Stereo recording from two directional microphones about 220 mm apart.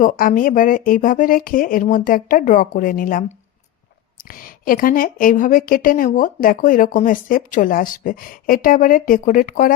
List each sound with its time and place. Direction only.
0.0 s a woman's voice: 40° left (ahead or behind)